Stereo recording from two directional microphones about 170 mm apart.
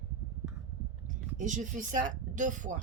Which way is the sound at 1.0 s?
50° right (ahead or behind).